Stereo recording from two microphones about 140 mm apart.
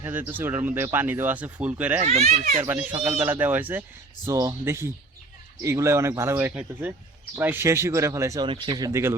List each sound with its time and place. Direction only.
0.0 s speech: 15° right (ahead or behind)
2.0 s a child's voice: 55° right (ahead or behind)
2.6 s speech: 15° right (ahead or behind)